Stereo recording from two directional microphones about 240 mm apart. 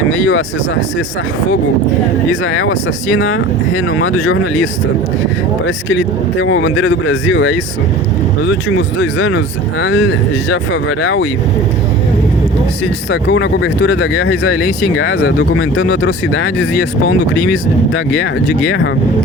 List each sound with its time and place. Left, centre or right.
0.1 s speech: left
2.3 s speech: left
9.0 s speech: left
13.1 s speech: left
14.4 s speech: left